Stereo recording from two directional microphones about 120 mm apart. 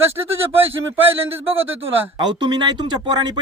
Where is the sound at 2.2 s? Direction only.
35° right (ahead or behind).